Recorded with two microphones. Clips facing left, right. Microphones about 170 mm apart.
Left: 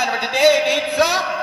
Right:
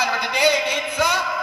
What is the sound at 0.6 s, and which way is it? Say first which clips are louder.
Speech: left 5 dB; 75° left (ahead or behind).